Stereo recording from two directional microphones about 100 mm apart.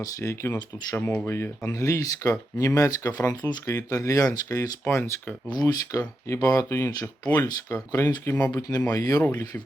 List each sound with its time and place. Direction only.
0.0 s speech: 30° left (ahead or behind)